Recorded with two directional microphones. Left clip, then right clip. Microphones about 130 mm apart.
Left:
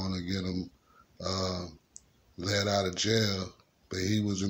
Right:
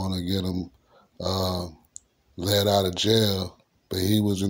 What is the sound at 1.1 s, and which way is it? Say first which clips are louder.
Speech: right 6 dB; 45° right (ahead or behind).